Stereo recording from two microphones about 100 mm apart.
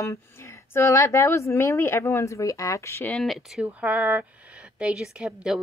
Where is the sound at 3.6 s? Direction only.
15° right (ahead or behind).